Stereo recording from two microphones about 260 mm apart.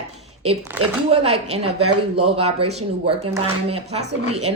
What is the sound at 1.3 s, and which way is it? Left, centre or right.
Speech, right.